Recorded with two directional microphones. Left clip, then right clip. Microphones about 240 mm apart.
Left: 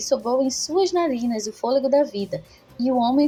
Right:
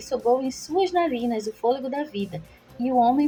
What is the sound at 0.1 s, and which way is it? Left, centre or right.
A woman's voice, left.